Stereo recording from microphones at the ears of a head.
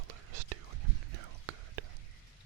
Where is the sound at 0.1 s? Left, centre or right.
Right.